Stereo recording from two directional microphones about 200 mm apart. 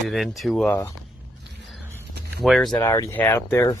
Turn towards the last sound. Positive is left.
turn(degrees=15)  # may be behind; listen again after turning